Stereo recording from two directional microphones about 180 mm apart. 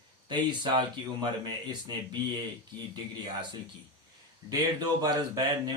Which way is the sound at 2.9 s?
25° right (ahead or behind).